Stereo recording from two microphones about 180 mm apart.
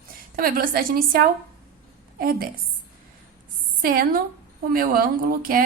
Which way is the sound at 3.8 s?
55° right (ahead or behind).